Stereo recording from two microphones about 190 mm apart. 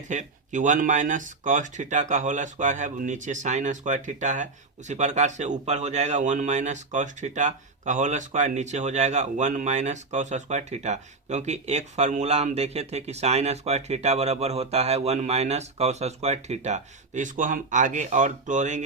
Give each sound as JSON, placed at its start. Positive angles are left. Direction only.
{"t": 0.1, "sound": "speech", "side_deg": -40}